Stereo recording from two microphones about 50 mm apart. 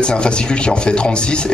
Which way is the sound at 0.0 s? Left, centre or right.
Centre.